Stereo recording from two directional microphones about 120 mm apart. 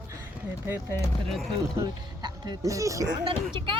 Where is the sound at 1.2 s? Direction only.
Centre (ahead or behind).